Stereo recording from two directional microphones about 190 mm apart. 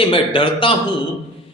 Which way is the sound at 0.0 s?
25° left (ahead or behind).